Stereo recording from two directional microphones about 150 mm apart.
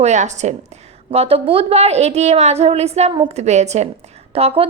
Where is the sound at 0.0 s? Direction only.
50° right (ahead or behind).